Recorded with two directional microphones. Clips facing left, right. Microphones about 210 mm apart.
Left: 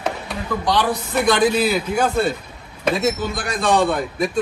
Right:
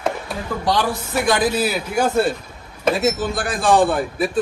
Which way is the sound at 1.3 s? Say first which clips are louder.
Left 2 dB; 5° right (ahead or behind).